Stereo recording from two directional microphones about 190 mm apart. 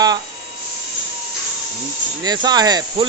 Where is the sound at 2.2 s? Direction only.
20° right (ahead or behind).